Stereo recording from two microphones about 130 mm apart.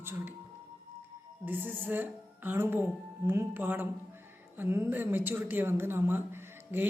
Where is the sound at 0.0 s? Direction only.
15° right (ahead or behind).